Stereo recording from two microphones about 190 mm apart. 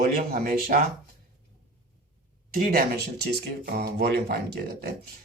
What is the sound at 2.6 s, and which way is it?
Speech, 50° right (ahead or behind).